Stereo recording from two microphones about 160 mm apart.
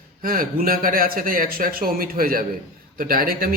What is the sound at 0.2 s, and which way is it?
A man's voice, 60° right (ahead or behind).